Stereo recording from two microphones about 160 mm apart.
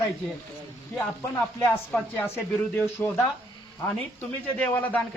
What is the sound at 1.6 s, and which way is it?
Speech, 10° left (ahead or behind).